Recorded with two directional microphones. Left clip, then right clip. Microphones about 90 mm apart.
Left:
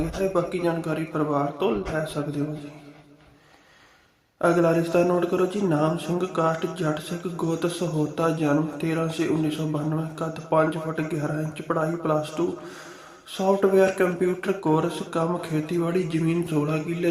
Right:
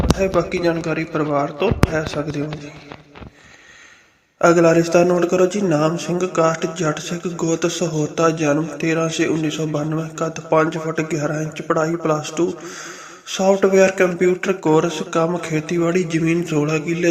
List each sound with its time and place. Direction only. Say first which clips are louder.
0.2 s a man's voice: right 2 dB; 35° right (ahead or behind)
4.4 s a man's voice: right 8 dB; 45° right (ahead or behind)